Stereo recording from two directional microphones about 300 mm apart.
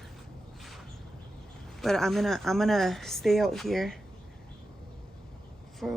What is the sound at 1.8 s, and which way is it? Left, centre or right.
Speech, centre.